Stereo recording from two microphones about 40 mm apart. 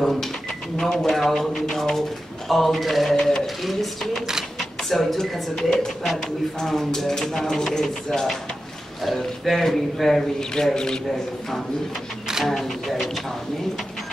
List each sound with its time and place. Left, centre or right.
0.0 s speech: centre
3.1 s speech: centre
3.6 s speech: centre
10.5 s speech: centre
12.4 s speech: centre